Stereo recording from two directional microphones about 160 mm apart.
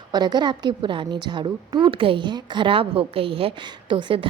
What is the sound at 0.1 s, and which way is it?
A woman's voice, 25° right (ahead or behind).